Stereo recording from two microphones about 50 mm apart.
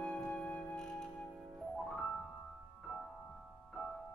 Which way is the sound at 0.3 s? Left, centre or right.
Left.